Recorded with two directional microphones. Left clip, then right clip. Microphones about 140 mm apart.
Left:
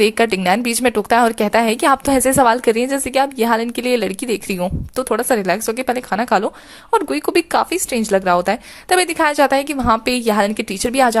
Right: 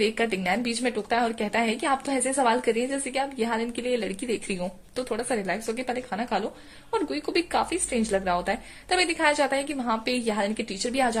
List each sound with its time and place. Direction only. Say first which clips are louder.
0.0 s a woman's voice: left 10 dB; 35° left (ahead or behind)